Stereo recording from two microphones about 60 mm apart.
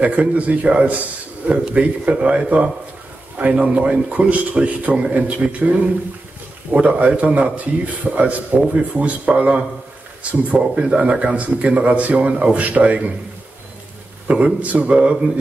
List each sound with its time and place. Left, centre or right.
0.0 s a man's voice: right
14.2 s a man's voice: right